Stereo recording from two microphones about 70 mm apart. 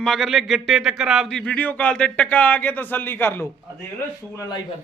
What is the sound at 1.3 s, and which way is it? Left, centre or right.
Speech, centre.